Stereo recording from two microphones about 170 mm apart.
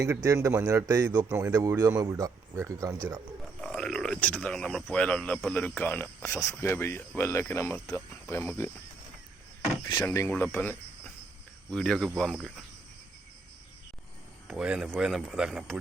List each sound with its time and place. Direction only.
0.0 s speech: 20° right (ahead or behind)
1.3 s speech: 10° right (ahead or behind)
1.5 s speech: 20° right (ahead or behind)
3.6 s speech: 5° left (ahead or behind)
10.0 s speech: 15° left (ahead or behind)
14.4 s speech: 5° right (ahead or behind)